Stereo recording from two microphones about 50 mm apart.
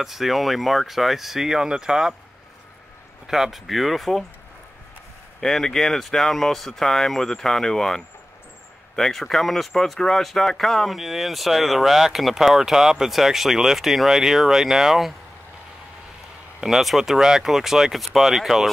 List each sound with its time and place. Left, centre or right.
0.0 s speech: centre
3.3 s speech: centre
5.4 s speech: centre
16.6 s speech: centre